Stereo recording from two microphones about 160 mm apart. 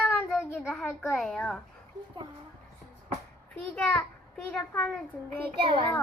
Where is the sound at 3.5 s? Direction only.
5° left (ahead or behind).